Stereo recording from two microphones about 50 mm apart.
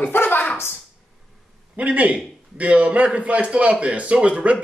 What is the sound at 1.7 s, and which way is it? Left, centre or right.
A man's voice, right.